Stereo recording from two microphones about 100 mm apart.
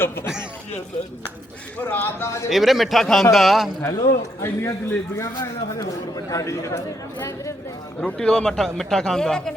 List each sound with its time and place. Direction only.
0.0 s a man's voice: 25° left (ahead or behind)
1.9 s a man's voice: 25° left (ahead or behind)
2.5 s a man's voice: centre (ahead or behind)
3.8 s a man's voice: 30° left (ahead or behind)
8.0 s a man's voice: 10° left (ahead or behind)